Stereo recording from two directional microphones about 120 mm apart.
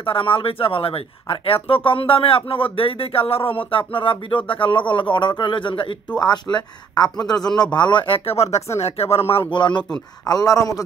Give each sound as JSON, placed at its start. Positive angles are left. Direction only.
{"t": 0.0, "sound": "speech", "side_deg": 45}
{"t": 9.3, "sound": "a man's voice", "side_deg": 45}